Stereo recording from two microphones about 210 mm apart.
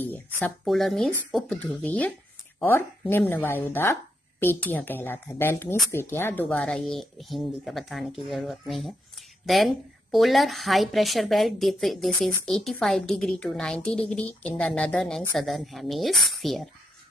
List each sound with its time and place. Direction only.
0.0 s a woman's voice: 10° left (ahead or behind)